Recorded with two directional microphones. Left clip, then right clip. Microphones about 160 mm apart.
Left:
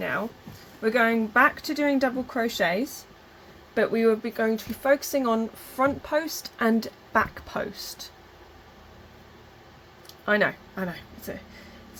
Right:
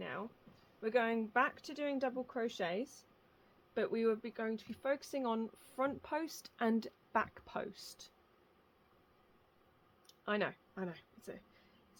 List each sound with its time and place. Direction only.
0.8 s speech: 75° right (ahead or behind)
3.8 s speech: 75° right (ahead or behind)
10.2 s speech: 60° right (ahead or behind)